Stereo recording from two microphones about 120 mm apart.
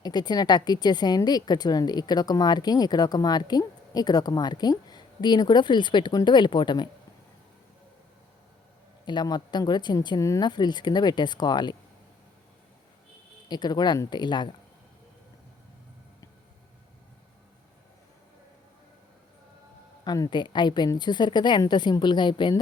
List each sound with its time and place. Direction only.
0.0 s a woman's voice: 35° left (ahead or behind)
9.0 s a woman's voice: 40° left (ahead or behind)
10.5 s a woman's voice: 35° left (ahead or behind)
13.5 s a woman's voice: 35° left (ahead or behind)
20.1 s a woman's voice: 35° left (ahead or behind)